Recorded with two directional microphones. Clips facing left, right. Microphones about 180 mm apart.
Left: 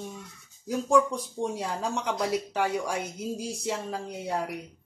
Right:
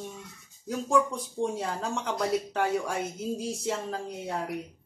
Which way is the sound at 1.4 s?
Centre (ahead or behind).